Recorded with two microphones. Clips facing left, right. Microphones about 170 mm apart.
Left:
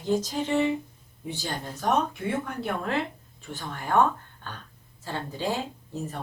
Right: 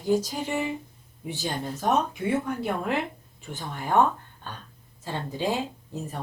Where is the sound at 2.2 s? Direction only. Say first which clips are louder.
Right 3 dB; centre (ahead or behind).